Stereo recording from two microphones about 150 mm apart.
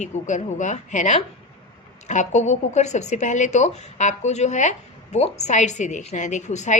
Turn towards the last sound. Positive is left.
turn(degrees=50)  # may be behind; listen again after turning